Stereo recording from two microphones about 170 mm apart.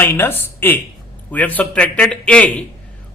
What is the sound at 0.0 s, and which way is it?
A man's voice, 10° left (ahead or behind).